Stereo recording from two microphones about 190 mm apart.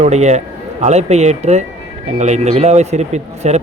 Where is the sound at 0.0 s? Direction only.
35° right (ahead or behind).